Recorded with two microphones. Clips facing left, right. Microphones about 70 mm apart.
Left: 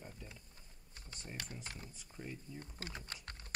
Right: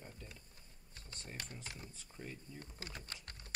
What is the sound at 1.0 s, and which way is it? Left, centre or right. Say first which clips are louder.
Speech: left 1 dB; centre.